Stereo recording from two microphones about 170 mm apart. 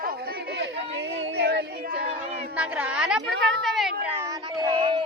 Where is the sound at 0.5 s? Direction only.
80° right.